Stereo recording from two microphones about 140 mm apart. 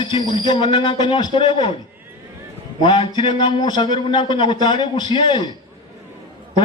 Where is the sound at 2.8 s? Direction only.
35° left (ahead or behind).